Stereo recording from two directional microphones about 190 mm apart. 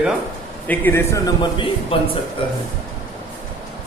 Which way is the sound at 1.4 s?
25° left (ahead or behind).